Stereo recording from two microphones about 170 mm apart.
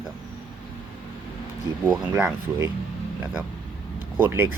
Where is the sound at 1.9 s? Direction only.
5° right (ahead or behind).